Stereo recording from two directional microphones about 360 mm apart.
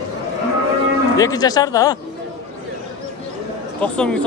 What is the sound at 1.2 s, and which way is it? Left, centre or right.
Speech, centre.